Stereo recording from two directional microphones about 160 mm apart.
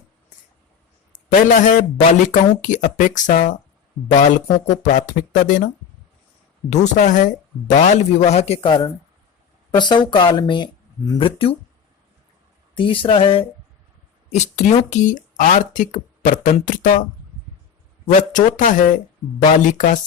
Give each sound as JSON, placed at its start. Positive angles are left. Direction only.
{"t": 1.4, "sound": "speech", "side_deg": 55}
{"t": 11.2, "sound": "speech", "side_deg": 35}
{"t": 12.7, "sound": "speech", "side_deg": 30}
{"t": 14.3, "sound": "speech", "side_deg": 45}
{"t": 18.0, "sound": "speech", "side_deg": 55}